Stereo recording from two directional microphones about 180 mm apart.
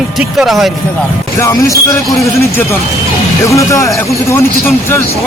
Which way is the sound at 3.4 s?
15° left (ahead or behind).